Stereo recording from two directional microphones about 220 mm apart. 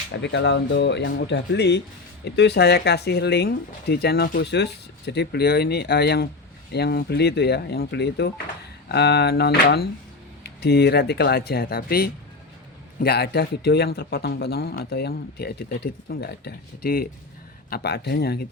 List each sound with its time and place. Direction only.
0.1 s speech: 55° left (ahead or behind)